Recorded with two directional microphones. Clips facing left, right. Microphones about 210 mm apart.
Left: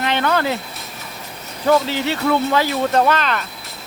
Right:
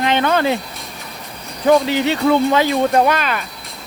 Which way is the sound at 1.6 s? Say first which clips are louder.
Right 3 dB; 20° right (ahead or behind).